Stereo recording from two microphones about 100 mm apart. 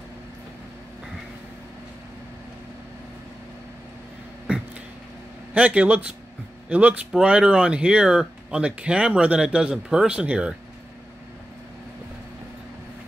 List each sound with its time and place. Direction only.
5.5 s speech: 15° right (ahead or behind)